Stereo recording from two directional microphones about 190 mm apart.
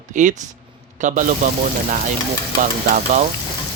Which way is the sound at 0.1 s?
40° right (ahead or behind).